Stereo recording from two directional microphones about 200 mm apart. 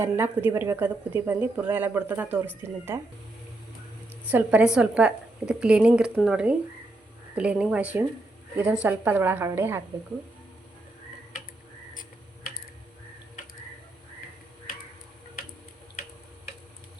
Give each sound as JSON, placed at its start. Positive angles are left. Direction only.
{"t": 0.0, "sound": "a woman's voice", "side_deg": -10}
{"t": 4.3, "sound": "a woman's voice", "side_deg": -10}